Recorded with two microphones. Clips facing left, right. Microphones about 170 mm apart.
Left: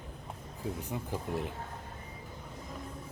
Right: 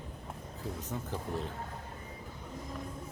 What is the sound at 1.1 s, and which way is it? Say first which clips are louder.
Speech: left 2 dB; 15° left (ahead or behind).